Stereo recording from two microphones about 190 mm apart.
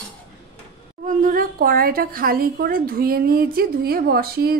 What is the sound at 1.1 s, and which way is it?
A woman's voice, 45° right (ahead or behind).